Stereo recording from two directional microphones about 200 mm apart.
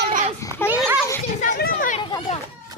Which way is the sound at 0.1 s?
40° right (ahead or behind).